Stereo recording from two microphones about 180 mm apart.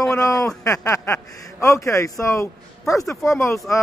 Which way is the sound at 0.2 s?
20° left (ahead or behind).